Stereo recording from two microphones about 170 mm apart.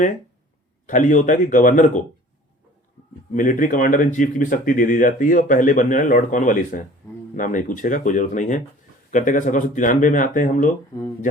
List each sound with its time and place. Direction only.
0.9 s speech: 50° left (ahead or behind)
3.3 s speech: 50° left (ahead or behind)